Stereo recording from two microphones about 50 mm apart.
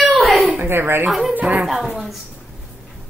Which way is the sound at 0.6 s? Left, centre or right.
Right.